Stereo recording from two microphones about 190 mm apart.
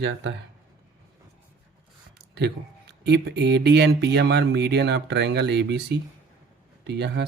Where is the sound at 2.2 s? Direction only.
60° right (ahead or behind).